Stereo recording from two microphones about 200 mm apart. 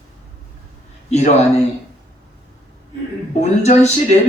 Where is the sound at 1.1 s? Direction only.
35° left (ahead or behind).